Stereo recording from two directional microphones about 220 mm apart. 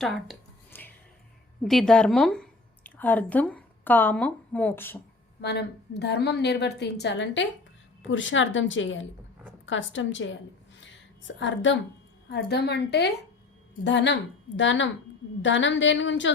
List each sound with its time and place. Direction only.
0.0 s a sound: 5° left (ahead or behind)
1.6 s a woman's voice: centre (ahead or behind)
5.4 s a woman's voice: 50° left (ahead or behind)
11.3 s a woman's voice: 55° left (ahead or behind)